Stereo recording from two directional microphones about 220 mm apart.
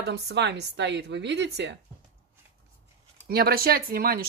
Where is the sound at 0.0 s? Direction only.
50° right (ahead or behind).